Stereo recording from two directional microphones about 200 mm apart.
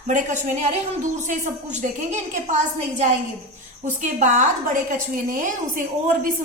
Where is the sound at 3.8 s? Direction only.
40° right (ahead or behind).